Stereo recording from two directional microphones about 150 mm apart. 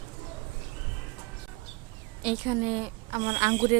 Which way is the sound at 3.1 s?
35° right (ahead or behind).